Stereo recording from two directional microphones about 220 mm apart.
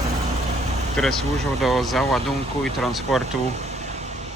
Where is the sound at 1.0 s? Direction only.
5° left (ahead or behind).